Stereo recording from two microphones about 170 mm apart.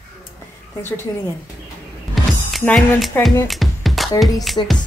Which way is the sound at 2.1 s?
Centre (ahead or behind).